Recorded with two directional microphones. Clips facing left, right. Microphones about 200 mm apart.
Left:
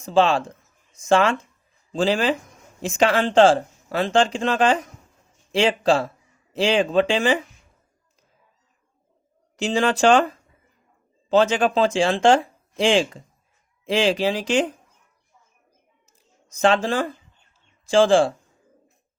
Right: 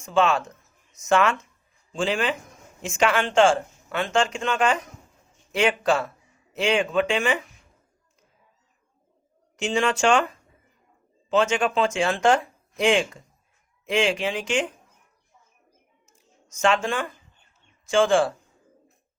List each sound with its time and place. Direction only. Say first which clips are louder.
0.0 s speech: left 3 dB; 30° left (ahead or behind)
9.6 s speech: left 3 dB; 35° left (ahead or behind)
11.3 s speech: left 4 dB; 35° left (ahead or behind)
16.0 s a sound: right 2 dB; 35° left (ahead or behind)
17.8 s speech: left 4 dB; 30° left (ahead or behind)